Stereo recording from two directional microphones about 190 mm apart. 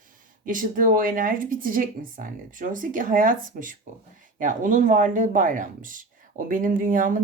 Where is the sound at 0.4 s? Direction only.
45° right (ahead or behind).